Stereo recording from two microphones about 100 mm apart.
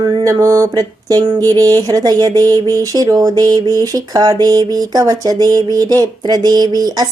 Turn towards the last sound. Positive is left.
turn(degrees=-40)  # may be behind; listen again after turning